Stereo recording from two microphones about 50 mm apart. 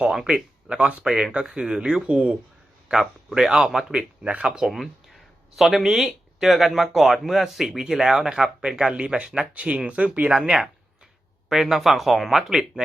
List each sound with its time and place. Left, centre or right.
0.0 s speech: centre
2.9 s a man's voice: centre; by 10.3 s right
10.3 s speech: centre